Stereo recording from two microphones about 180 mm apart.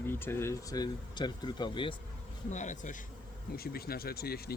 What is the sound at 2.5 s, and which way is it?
Speech, 45° left (ahead or behind).